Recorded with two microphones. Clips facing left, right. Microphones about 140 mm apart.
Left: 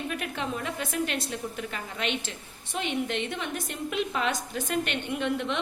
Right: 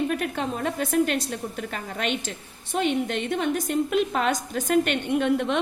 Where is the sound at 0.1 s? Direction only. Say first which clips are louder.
Right 5 dB; 45° right (ahead or behind).